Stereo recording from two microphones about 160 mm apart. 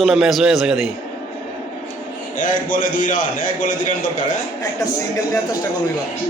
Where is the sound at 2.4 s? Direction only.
55° left (ahead or behind).